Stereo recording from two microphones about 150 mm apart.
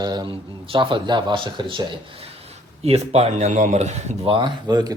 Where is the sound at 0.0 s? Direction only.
30° right (ahead or behind).